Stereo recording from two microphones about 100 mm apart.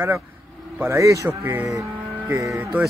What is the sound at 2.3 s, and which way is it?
Speech, 30° right (ahead or behind).